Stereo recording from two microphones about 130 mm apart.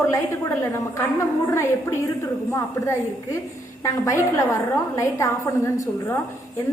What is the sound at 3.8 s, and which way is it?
A woman's voice, 25° left (ahead or behind).